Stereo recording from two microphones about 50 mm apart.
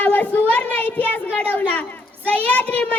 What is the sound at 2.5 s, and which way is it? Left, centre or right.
Speech, left.